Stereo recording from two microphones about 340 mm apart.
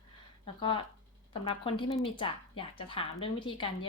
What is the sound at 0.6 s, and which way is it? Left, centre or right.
Speech, centre.